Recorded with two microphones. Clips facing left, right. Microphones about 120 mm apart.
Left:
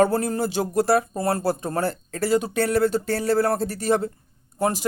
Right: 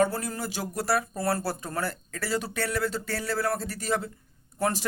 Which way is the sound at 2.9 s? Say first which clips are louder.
Left 9 dB; 40° left (ahead or behind).